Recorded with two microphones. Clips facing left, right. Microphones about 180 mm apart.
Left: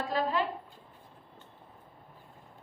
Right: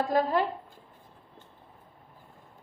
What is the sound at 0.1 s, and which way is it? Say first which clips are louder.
Speech: right 3 dB; 45° right (ahead or behind).